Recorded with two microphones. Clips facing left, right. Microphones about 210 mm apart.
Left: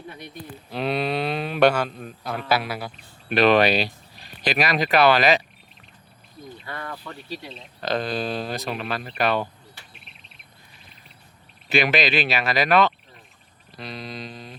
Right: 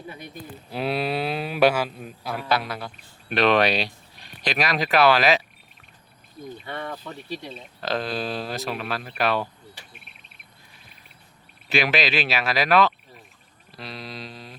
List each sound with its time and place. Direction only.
0.7 s a man's voice: 5° right (ahead or behind)
6.7 s speech: 25° right (ahead or behind)
7.0 s speech: centre (ahead or behind)
11.7 s speech: centre (ahead or behind)
13.7 s mantra: centre (ahead or behind)